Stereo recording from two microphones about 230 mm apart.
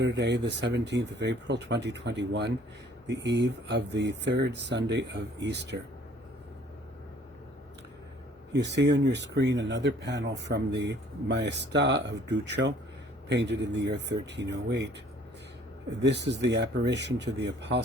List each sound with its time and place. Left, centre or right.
0.0 s speech: right
8.5 s speech: right
16.0 s speech: right